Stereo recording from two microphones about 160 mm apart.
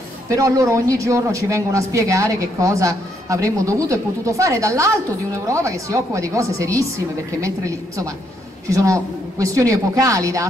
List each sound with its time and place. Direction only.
0.3 s a man's voice: 20° right (ahead or behind)